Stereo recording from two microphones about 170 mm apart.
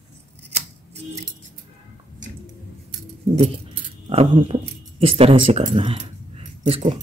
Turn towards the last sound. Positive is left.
turn(degrees=-35)  # may be behind; listen again after turning